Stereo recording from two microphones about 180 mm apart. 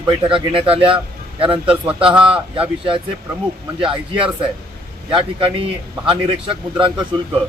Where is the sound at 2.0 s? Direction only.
30° right (ahead or behind).